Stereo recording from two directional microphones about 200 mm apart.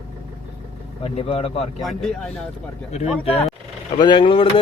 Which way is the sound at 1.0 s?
30° left (ahead or behind).